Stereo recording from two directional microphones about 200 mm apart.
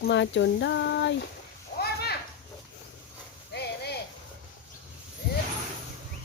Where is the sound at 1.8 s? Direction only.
50° left (ahead or behind).